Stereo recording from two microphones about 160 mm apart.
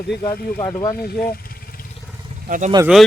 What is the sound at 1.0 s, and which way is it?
Speech, 65° left (ahead or behind).